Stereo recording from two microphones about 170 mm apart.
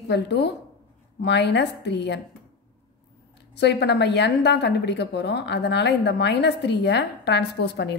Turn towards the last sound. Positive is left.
turn(degrees=80)